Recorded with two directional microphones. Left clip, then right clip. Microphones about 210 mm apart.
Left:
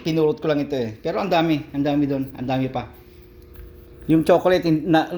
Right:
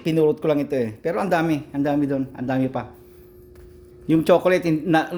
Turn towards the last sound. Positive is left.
turn(degrees=-10)  # may be behind; listen again after turning